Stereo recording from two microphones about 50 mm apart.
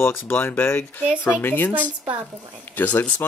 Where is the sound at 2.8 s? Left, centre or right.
Left.